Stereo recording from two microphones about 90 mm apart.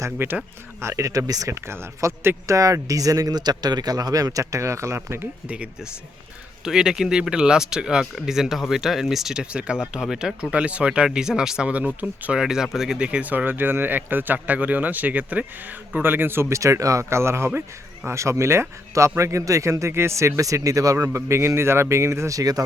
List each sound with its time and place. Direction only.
0.0 s a man's voice: 25° right (ahead or behind); by 1.5 s 40° right (ahead or behind)
1.6 s a man's voice: 30° right (ahead or behind)
5.5 s a man's voice: 15° right (ahead or behind); by 22.6 s 40° right (ahead or behind)